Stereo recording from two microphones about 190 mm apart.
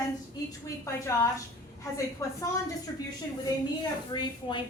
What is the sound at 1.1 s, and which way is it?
A woman's voice, 15° left (ahead or behind).